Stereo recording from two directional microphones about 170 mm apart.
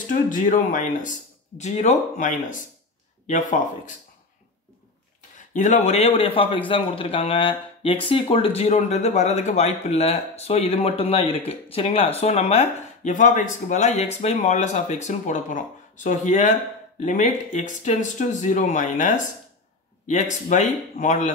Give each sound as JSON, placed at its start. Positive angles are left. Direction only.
{"t": 0.1, "sound": "speech", "side_deg": 50}
{"t": 5.5, "sound": "speech", "side_deg": 50}